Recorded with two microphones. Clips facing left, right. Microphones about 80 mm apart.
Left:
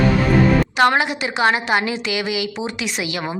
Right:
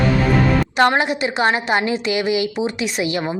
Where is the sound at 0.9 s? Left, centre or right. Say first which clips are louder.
Right 1 dB; right.